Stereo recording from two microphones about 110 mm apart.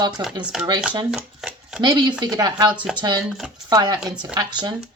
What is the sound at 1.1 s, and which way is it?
Speech, 5° right (ahead or behind).